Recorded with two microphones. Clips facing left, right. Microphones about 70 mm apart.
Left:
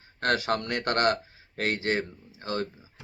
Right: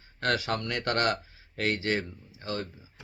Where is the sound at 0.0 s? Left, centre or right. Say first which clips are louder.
Left 2 dB; left.